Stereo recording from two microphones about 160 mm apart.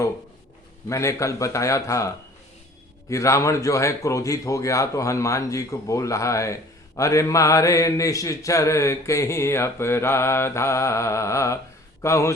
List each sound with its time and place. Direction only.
0.9 s a man's voice: 20° left (ahead or behind)